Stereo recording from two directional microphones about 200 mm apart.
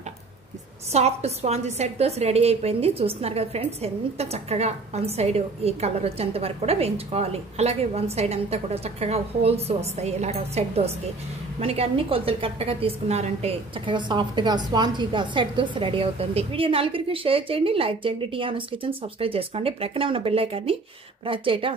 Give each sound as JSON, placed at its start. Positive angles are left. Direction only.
{"t": 0.9, "sound": "a woman's voice", "side_deg": -30}